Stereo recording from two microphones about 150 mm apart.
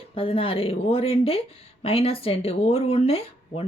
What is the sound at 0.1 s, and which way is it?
Speech, 35° left (ahead or behind).